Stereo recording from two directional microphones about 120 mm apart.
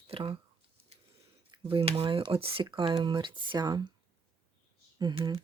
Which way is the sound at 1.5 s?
50° right (ahead or behind).